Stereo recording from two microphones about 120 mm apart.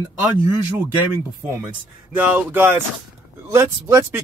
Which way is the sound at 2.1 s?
10° right (ahead or behind).